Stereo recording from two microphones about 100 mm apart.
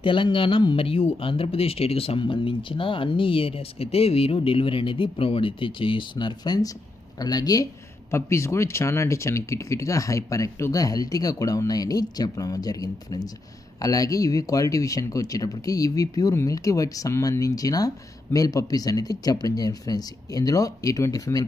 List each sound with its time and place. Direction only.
0.0 s speech: 55° left (ahead or behind); by 7.6 s 40° left (ahead or behind)
8.1 s speech: 30° left (ahead or behind)